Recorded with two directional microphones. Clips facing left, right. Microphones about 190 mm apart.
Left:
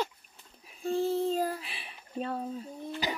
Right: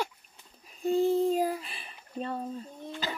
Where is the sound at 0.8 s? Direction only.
15° right (ahead or behind).